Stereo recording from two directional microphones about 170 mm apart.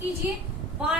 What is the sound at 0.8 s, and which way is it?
Speech, 5° right (ahead or behind).